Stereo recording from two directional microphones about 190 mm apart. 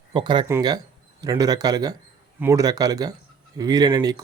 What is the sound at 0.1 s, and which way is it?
Speech, 25° right (ahead or behind).